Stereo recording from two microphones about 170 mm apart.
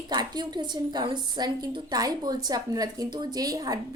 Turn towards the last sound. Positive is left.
turn(degrees=-20)  # may be behind; listen again after turning